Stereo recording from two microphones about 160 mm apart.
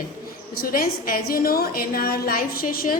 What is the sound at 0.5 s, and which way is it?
A woman's voice, 70° left (ahead or behind).